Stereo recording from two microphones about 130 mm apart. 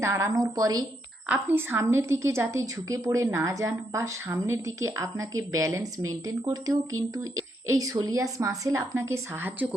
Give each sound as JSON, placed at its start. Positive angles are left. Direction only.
{"t": 0.0, "sound": "a woman's voice", "side_deg": -25}
{"t": 1.3, "sound": "a woman's voice", "side_deg": -15}